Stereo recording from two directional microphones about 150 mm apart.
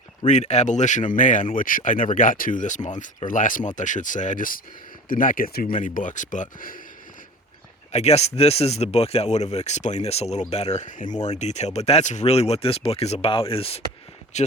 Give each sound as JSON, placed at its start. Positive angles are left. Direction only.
{"t": 0.3, "sound": "speech", "side_deg": 50}
{"t": 7.9, "sound": "speech", "side_deg": 45}